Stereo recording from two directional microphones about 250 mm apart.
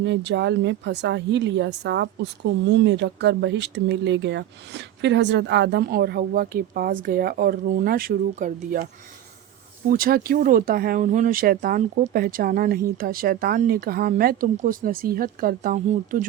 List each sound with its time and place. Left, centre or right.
0.0 s speech: right
9.9 s speech: right